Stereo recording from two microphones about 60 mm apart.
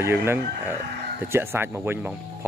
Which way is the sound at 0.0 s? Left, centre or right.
Right.